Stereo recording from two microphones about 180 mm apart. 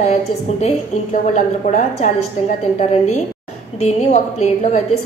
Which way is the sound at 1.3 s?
40° left (ahead or behind).